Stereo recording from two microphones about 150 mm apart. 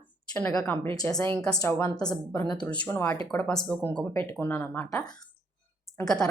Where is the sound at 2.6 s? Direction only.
10° left (ahead or behind).